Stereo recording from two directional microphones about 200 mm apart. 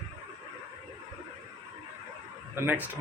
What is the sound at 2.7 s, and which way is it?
Speech, 10° right (ahead or behind).